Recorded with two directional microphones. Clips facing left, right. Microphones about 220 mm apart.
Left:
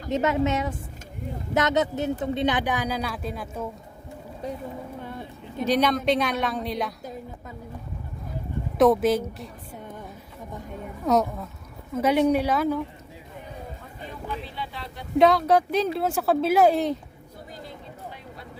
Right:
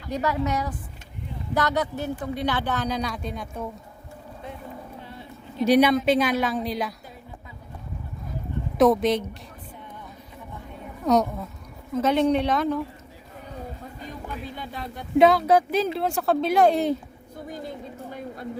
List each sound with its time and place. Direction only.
0.1 s a woman's voice: 25° left (ahead or behind); by 3.7 s 5° left (ahead or behind)
4.4 s speech: 40° left (ahead or behind)
5.0 s a sound: 50° left (ahead or behind)
5.6 s speech: 10° right (ahead or behind)
8.8 s speech: centre (ahead or behind)
11.0 s speech: centre (ahead or behind)
14.4 s speech: 45° right (ahead or behind)
15.2 s speech: centre (ahead or behind)